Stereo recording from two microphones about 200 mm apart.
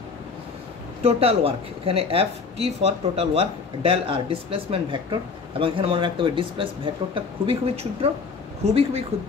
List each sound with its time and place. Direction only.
1.0 s speech: 30° right (ahead or behind)